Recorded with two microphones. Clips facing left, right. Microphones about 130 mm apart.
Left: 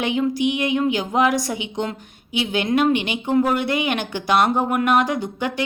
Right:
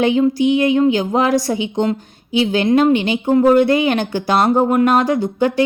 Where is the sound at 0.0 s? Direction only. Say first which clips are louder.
Right 6 dB; 30° right (ahead or behind).